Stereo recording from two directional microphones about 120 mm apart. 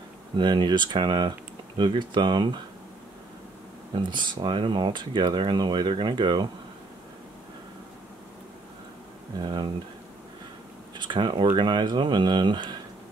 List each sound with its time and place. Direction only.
0.4 s speech: 40° right (ahead or behind)
3.9 s speech: 40° right (ahead or behind)
9.4 s speech: 40° right (ahead or behind)
11.0 s speech: 40° right (ahead or behind)